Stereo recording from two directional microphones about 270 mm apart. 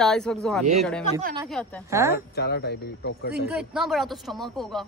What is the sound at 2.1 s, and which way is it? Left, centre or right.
Speech, left.